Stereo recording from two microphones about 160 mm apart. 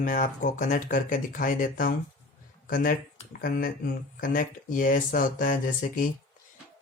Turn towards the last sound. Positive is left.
turn(degrees=60)  # may be behind; listen again after turning